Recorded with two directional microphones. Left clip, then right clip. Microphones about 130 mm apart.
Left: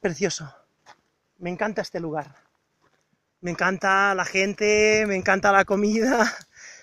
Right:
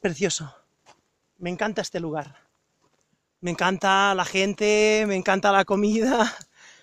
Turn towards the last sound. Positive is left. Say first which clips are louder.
# left 1 dB
turn(degrees=-10)  # may be behind; listen again after turning